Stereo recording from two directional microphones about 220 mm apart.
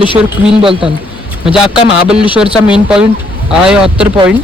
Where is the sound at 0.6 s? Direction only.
25° right (ahead or behind).